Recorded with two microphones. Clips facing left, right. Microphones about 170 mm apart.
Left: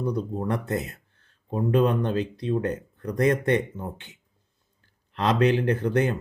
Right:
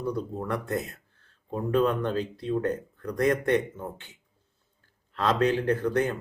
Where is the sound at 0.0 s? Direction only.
20° left (ahead or behind).